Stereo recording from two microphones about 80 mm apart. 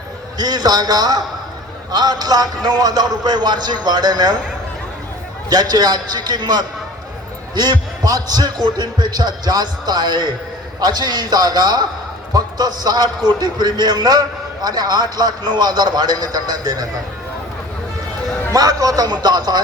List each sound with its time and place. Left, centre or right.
0.3 s a man's voice: right
5.5 s a man's voice: right
18.5 s a man's voice: right